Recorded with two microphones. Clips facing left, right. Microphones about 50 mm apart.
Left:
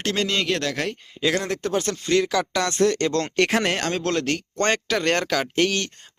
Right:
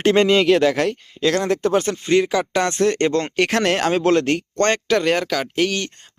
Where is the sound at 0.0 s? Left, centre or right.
Right.